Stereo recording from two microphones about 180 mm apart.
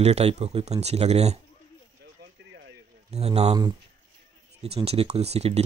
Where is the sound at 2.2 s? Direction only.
90° right.